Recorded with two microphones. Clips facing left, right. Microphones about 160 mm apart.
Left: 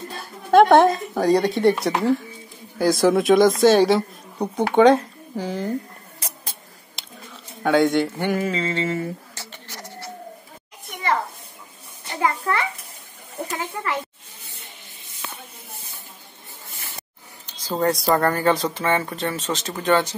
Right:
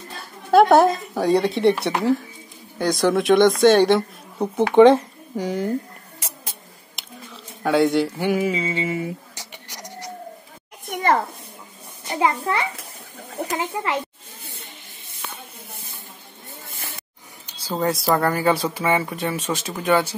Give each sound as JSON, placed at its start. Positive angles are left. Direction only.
{"t": 0.2, "sound": "speech", "side_deg": 0}
{"t": 7.6, "sound": "speech", "side_deg": 0}
{"t": 12.1, "sound": "a child's voice", "side_deg": -20}
{"t": 13.7, "sound": "a child's voice", "side_deg": -20}
{"t": 17.5, "sound": "speech", "side_deg": -5}